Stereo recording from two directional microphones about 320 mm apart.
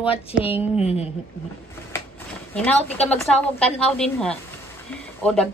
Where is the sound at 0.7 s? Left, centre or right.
Centre.